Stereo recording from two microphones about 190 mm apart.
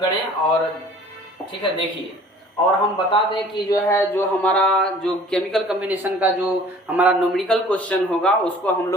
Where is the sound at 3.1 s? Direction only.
20° left (ahead or behind).